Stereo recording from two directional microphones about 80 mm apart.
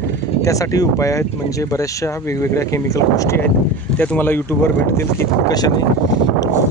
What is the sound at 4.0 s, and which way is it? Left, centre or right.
Speech, left.